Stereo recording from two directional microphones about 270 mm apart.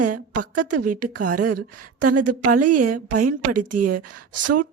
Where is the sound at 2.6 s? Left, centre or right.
Right.